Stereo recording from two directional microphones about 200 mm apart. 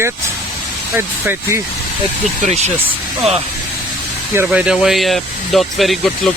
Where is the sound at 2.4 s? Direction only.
35° right (ahead or behind).